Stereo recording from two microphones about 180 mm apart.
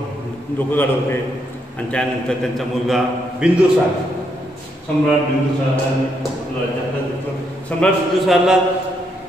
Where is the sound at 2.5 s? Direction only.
Centre (ahead or behind).